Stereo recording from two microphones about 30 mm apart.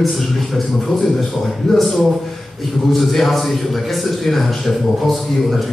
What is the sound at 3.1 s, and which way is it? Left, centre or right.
A man's voice, centre.